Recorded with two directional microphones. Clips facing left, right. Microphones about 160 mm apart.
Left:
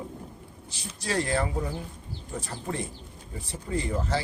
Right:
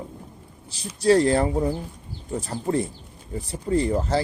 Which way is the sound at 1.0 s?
35° right (ahead or behind).